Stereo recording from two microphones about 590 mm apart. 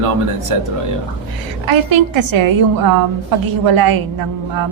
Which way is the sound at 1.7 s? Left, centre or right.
Right.